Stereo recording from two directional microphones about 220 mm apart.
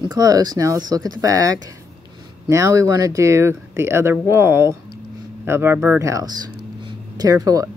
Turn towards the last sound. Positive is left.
turn(degrees=-15)  # may be behind; listen again after turning